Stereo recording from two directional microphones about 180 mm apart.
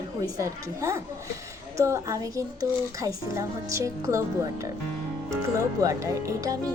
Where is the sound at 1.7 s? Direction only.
15° right (ahead or behind).